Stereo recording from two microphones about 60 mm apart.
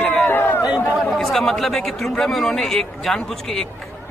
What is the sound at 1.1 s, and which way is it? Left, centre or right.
A man's voice, centre.